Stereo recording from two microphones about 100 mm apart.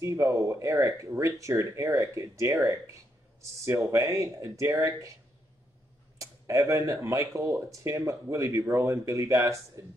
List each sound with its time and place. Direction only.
0.0 s speech: 35° right (ahead or behind)
3.9 s speech: 35° right (ahead or behind)
6.1 s speech: 30° right (ahead or behind)